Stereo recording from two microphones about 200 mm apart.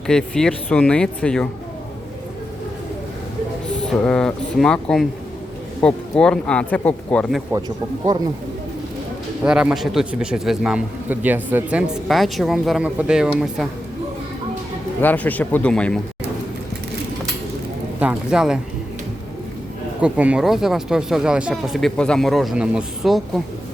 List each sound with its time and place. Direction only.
0.1 s speech: 5° left (ahead or behind)
3.9 s speech: 5° left (ahead or behind)
8.1 s speech: 20° right (ahead or behind)
9.4 s speech: 5° right (ahead or behind)
15.0 s speech: 10° left (ahead or behind)
18.0 s speech: 5° right (ahead or behind)
20.0 s speech: 5° right (ahead or behind)